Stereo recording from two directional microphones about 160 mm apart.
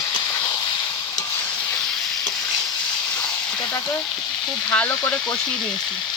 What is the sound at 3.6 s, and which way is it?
Frying, 20° left (ahead or behind).